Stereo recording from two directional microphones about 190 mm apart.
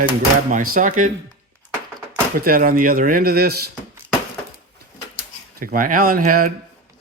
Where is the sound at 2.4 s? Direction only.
50° right (ahead or behind).